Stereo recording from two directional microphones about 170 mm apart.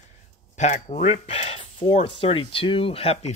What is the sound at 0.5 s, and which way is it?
Speech, 40° left (ahead or behind).